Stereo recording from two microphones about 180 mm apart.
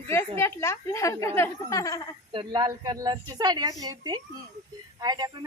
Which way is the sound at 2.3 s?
25° right (ahead or behind).